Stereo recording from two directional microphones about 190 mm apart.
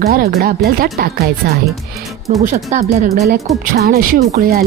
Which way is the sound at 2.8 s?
55° right (ahead or behind).